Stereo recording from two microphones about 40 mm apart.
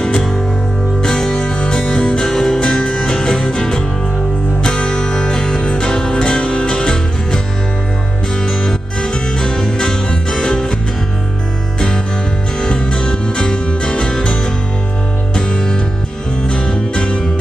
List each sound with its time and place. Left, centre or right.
1.0 s music: centre
8.5 s music: left
12.5 s music: left